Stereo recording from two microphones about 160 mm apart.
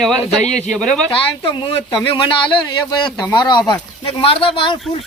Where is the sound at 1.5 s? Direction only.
30° left (ahead or behind).